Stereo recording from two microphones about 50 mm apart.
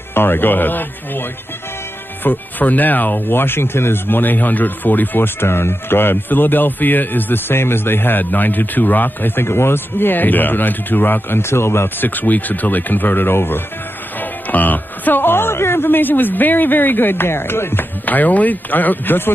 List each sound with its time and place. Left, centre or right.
0.1 s speech: left
12.0 s speech: left
14.2 s speech: left
18.0 s speech: left